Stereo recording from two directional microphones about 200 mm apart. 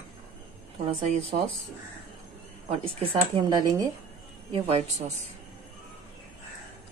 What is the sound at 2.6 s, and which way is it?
Speech, 25° right (ahead or behind).